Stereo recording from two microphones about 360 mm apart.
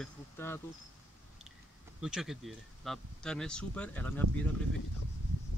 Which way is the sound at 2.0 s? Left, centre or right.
Centre.